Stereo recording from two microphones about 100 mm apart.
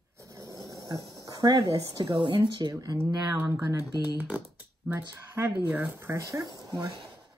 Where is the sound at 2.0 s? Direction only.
55° right (ahead or behind); by 2.9 s 40° right (ahead or behind).